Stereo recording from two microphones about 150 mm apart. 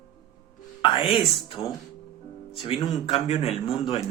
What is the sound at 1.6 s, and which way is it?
Speech, 20° left (ahead or behind).